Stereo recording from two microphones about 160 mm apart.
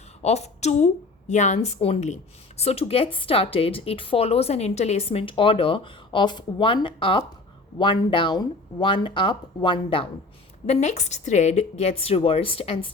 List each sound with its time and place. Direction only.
0.2 s a woman's voice: 45° left (ahead or behind)
10.7 s a woman's voice: 45° left (ahead or behind)